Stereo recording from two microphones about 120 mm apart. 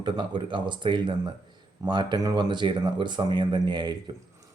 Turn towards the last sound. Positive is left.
turn(degrees=-40)  # may be behind; listen again after turning